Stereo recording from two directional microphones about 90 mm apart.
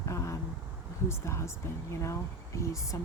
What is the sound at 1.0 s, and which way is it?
Speech, 30° left (ahead or behind).